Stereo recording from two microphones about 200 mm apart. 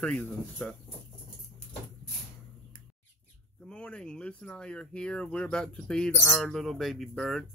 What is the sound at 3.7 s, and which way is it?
Speech, 5° left (ahead or behind).